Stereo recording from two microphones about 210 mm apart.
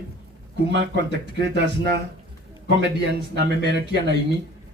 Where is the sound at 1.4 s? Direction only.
55° right (ahead or behind).